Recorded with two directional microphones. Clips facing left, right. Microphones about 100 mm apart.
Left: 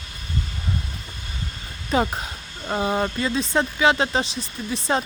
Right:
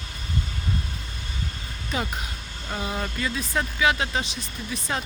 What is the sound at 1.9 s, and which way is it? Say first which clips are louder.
Speech: left 8 dB; 40° left (ahead or behind).